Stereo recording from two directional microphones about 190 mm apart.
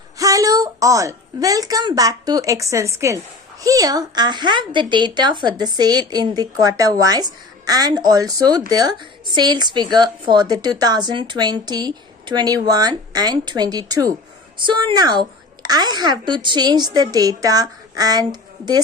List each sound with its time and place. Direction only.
0.2 s speech: 20° right (ahead or behind)